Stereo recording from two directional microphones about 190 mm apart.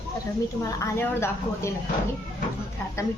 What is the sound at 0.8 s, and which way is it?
Speech, 15° left (ahead or behind).